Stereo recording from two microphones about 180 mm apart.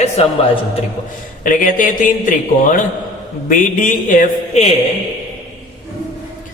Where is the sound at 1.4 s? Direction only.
50° left (ahead or behind).